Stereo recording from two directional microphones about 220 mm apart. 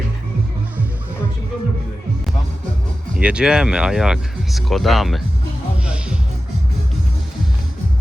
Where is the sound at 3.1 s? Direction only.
5° right (ahead or behind).